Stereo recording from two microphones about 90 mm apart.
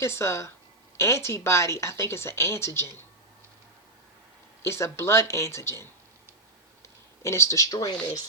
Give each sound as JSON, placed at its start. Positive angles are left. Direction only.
{"t": 0.0, "sound": "speech", "side_deg": 30}
{"t": 4.6, "sound": "speech", "side_deg": 30}